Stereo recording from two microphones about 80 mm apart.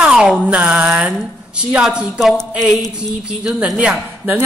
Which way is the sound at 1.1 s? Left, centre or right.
Centre.